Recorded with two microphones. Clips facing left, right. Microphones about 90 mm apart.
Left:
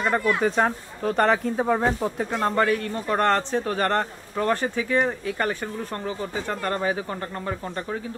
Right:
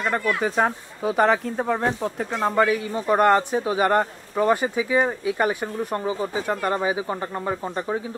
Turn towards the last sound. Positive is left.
turn(degrees=-15)  # may be behind; listen again after turning